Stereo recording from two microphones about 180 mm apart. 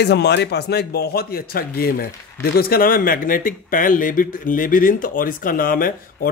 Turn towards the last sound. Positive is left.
turn(degrees=50)  # may be behind; listen again after turning